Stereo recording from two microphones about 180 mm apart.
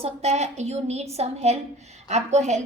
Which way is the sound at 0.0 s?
35° right (ahead or behind).